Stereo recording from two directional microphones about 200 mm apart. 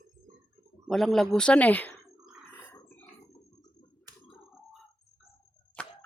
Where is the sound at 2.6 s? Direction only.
10° left (ahead or behind).